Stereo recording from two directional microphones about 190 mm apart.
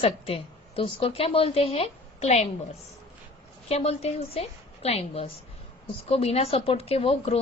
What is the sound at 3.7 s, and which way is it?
A woman's voice, 35° left (ahead or behind).